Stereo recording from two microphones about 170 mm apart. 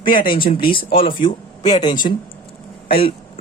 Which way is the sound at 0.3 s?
30° left (ahead or behind).